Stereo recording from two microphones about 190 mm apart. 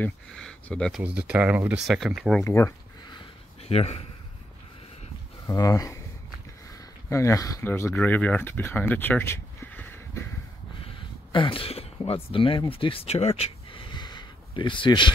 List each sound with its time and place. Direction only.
0.0 s speech: 5° left (ahead or behind)
2.4 s a sound: 15° left (ahead or behind)
3.2 s a sound: 35° left (ahead or behind)
5.5 s speech: 15° left (ahead or behind)
7.1 s speech: 15° left (ahead or behind)
11.3 s speech: 25° left (ahead or behind)